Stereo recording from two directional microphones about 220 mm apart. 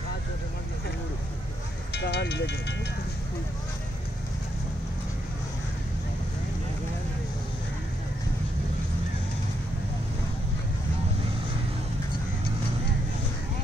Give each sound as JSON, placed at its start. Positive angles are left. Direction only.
{"t": 2.0, "sound": "speech", "side_deg": 50}